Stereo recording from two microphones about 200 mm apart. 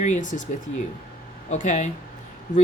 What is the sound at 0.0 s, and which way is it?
Speech, 40° left (ahead or behind).